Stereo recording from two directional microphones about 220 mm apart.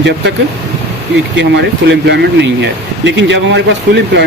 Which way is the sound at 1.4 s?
50° right (ahead or behind).